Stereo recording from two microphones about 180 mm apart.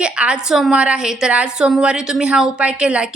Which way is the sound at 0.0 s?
5° right (ahead or behind).